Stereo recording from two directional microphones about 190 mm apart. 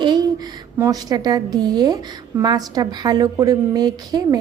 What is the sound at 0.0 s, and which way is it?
A woman's voice, 20° right (ahead or behind).